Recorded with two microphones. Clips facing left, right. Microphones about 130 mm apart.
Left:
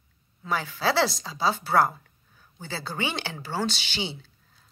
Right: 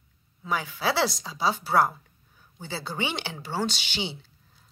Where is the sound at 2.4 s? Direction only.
15° right (ahead or behind).